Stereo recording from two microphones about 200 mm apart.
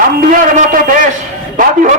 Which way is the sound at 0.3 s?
40° right (ahead or behind).